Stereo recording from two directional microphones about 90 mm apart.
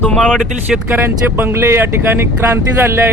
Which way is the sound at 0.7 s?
20° right (ahead or behind).